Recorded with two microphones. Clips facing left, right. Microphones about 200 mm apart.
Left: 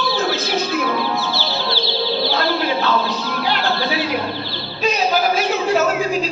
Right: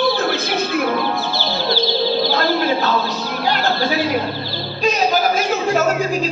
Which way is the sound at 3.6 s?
45° right (ahead or behind).